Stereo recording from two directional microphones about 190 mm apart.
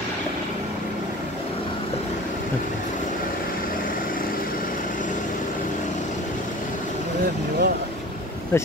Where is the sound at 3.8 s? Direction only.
45° left (ahead or behind).